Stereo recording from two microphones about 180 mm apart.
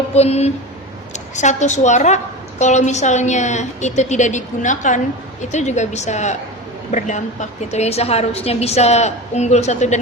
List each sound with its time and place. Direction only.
0.2 s a woman's voice: 35° left (ahead or behind)